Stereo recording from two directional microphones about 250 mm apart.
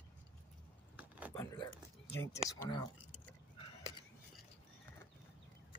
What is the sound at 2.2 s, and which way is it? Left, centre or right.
Speech, centre.